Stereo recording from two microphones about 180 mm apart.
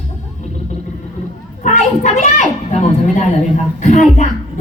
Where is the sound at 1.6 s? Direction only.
45° left (ahead or behind).